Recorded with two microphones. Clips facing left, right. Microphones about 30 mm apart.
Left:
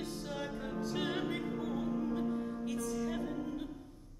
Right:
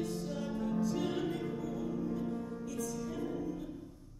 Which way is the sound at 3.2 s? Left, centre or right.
Left.